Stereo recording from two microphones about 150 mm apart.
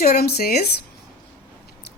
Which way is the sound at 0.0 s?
90° left.